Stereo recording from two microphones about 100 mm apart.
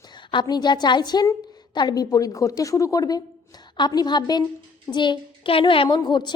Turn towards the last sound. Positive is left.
turn(degrees=50)  # may be behind; listen again after turning